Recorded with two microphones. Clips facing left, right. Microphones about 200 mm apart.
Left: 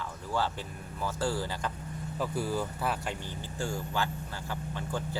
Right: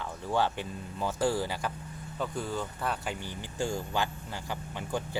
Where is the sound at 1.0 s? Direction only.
15° right (ahead or behind).